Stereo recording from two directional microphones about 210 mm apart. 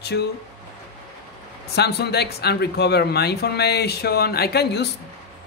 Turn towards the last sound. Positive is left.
turn(degrees=50)  # may be behind; listen again after turning